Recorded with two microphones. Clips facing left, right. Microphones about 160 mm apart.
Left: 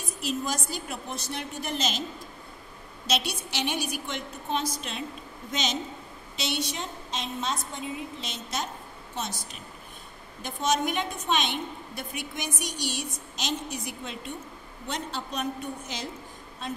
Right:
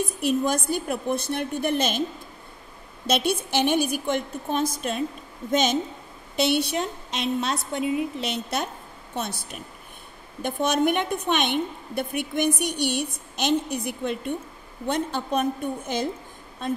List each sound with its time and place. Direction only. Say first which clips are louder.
0.2 s a woman's voice: right 6 dB; 55° right (ahead or behind)
3.1 s a woman's voice: right 7 dB; 50° right (ahead or behind)